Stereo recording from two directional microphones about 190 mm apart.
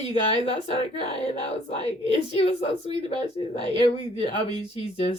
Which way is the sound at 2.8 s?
35° left (ahead or behind).